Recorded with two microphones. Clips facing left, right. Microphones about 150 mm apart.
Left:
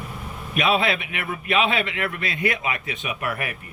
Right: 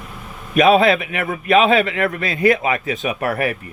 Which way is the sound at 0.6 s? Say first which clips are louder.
Right 9 dB; 40° right (ahead or behind).